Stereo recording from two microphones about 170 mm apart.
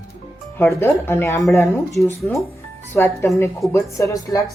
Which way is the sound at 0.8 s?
15° left (ahead or behind).